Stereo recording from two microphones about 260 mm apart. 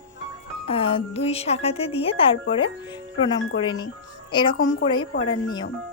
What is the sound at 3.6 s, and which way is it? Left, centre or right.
A woman's voice, centre.